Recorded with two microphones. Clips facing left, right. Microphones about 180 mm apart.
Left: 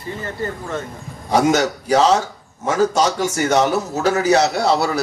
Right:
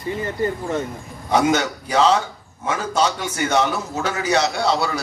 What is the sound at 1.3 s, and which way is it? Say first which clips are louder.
A man's voice: left 2 dB; 40° left (ahead or behind).